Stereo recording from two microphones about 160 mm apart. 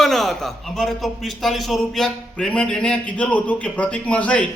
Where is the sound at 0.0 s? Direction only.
Centre (ahead or behind).